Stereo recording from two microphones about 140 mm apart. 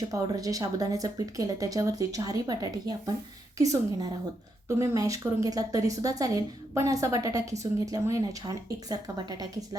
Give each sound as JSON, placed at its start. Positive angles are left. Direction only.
{"t": 0.1, "sound": "speech", "side_deg": -25}